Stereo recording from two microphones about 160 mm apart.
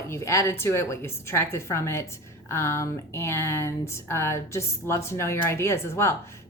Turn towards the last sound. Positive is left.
turn(degrees=15)  # may be behind; listen again after turning